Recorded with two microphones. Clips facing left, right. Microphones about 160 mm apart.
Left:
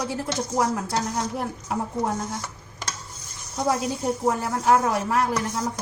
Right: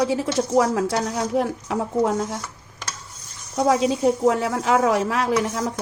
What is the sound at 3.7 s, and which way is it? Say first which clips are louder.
Speech: right 8 dB; 90° right.